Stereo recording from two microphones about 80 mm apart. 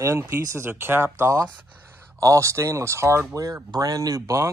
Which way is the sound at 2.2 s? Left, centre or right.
Right.